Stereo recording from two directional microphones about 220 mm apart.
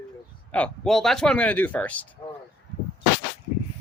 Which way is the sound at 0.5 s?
5° left (ahead or behind).